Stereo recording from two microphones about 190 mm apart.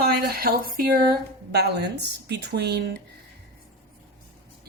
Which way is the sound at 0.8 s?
50° right (ahead or behind).